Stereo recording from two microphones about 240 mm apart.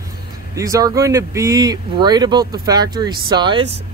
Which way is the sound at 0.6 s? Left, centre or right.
Centre.